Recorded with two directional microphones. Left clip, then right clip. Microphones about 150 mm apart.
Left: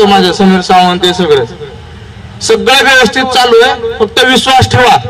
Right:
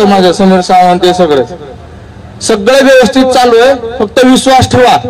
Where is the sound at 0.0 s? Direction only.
10° right (ahead or behind).